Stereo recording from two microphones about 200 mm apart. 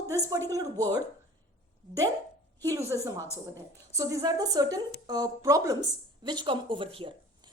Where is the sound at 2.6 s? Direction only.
15° right (ahead or behind).